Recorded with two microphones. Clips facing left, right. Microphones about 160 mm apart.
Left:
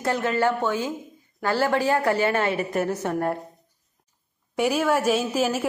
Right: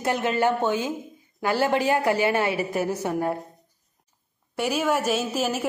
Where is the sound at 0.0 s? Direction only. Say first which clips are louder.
Even; 20° right (ahead or behind).